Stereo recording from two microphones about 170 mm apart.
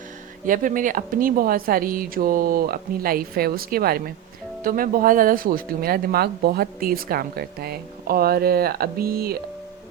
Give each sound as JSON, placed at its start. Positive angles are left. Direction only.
{"t": 0.4, "sound": "speech", "side_deg": -50}